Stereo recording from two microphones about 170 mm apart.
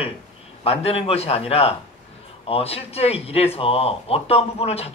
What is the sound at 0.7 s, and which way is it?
Speech, 35° left (ahead or behind).